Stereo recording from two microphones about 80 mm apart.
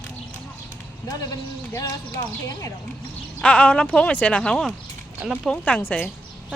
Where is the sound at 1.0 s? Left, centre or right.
Left.